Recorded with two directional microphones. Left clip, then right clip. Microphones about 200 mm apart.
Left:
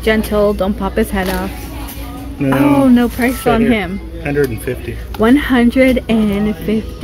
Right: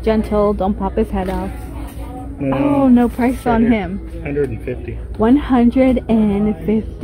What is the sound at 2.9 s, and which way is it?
Speech, 5° right (ahead or behind).